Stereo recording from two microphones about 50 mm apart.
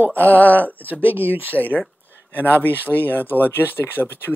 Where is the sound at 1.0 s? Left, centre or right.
Right.